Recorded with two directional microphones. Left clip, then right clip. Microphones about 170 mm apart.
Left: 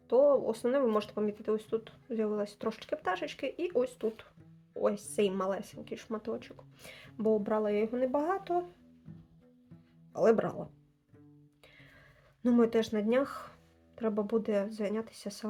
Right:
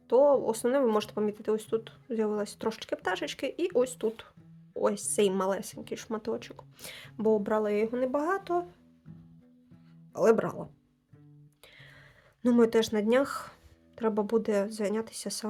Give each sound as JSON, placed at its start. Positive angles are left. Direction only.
{"t": 0.1, "sound": "speech", "side_deg": -40}
{"t": 10.1, "sound": "speech", "side_deg": -30}
{"t": 12.4, "sound": "speech", "side_deg": -40}